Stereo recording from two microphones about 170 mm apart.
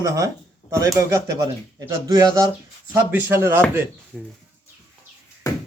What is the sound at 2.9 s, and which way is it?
Speech, 10° right (ahead or behind).